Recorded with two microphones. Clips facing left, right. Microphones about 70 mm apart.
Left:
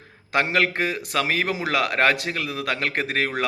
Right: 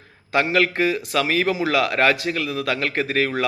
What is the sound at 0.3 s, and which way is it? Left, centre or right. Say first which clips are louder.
A man's voice: right 2 dB; left.